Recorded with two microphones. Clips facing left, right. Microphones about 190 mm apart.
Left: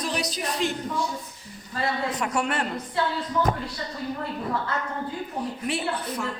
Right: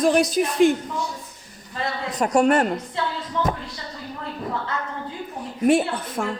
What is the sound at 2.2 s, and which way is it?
Speech, 45° right (ahead or behind).